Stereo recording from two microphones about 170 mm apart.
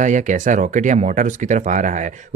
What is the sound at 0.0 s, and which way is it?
Speech, 45° right (ahead or behind).